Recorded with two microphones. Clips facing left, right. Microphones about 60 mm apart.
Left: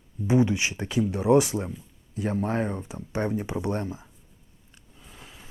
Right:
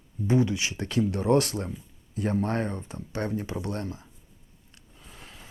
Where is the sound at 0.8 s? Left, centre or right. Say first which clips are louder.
Left 1 dB; centre.